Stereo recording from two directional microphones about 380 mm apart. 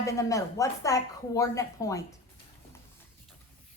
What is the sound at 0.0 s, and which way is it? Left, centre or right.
Speech, centre.